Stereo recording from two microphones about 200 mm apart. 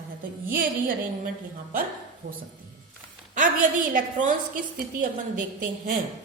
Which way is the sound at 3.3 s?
40° right (ahead or behind).